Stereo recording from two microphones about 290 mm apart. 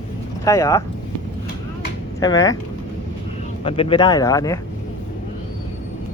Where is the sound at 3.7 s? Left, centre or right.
Centre.